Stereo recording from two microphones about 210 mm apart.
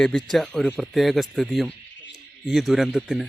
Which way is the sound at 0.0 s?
5° left (ahead or behind).